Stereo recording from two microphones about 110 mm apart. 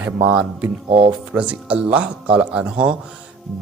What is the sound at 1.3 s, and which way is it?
A man's voice, 10° right (ahead or behind).